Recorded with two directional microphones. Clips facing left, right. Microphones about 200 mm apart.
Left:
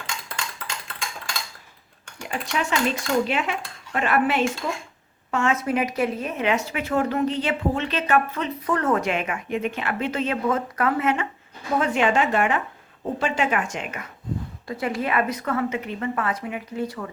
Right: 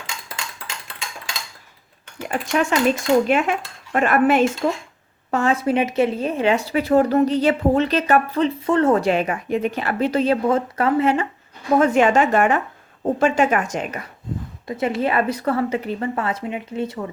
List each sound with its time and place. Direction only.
2.5 s speech: 50° right (ahead or behind)
5.3 s speech: 35° right (ahead or behind)
11.8 s speech: 45° right (ahead or behind)
14.7 s a woman's voice: 25° right (ahead or behind)